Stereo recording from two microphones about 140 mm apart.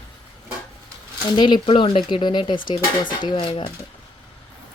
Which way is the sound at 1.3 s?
35° left (ahead or behind).